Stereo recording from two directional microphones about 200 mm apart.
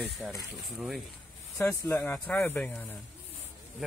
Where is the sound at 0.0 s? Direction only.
Centre (ahead or behind).